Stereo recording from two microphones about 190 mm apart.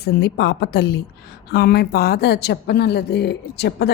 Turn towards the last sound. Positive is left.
turn(degrees=60)  # may be behind; listen again after turning